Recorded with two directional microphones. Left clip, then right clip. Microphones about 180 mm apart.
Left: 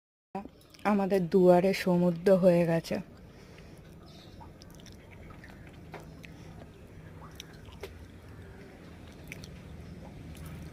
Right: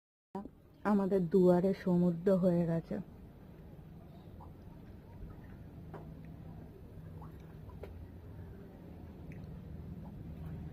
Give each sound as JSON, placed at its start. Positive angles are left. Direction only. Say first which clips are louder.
{"t": 0.3, "sound": "speech", "louder": "left 5 dB", "side_deg": 25}